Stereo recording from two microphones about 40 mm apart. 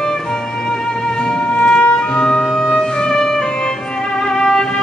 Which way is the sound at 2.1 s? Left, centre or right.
Left.